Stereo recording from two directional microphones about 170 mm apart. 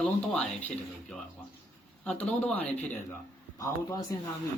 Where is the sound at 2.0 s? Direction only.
10° left (ahead or behind).